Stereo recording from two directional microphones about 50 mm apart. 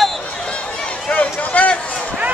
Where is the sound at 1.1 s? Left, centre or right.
Left.